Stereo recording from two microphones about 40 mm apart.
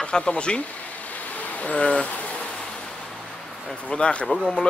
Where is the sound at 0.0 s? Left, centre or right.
Left.